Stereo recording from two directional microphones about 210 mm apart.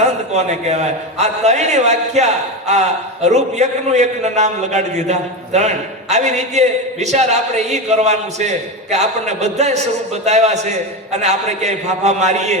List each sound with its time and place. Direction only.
0.3 s a man's voice: 30° right (ahead or behind)